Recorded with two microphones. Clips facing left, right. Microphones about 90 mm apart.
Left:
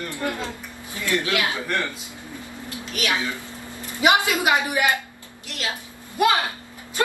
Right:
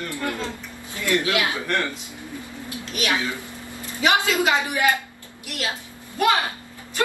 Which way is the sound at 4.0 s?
15° left (ahead or behind).